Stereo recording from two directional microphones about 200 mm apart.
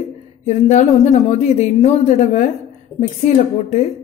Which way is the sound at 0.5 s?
35° left (ahead or behind).